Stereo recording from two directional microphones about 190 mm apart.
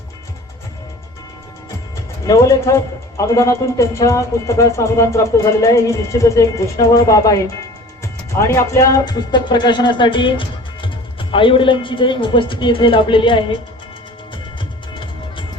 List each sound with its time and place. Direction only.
2.2 s speech: 15° left (ahead or behind)